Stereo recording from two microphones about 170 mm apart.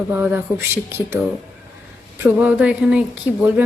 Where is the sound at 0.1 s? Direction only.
10° right (ahead or behind).